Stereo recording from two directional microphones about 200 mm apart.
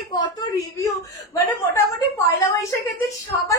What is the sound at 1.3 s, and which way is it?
A woman's voice, 15° left (ahead or behind).